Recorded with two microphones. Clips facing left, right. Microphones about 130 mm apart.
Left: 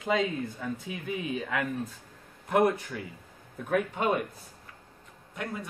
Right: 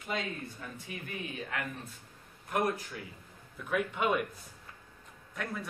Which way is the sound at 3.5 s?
50° left (ahead or behind).